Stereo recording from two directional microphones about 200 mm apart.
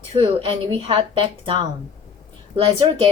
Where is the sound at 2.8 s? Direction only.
20° right (ahead or behind).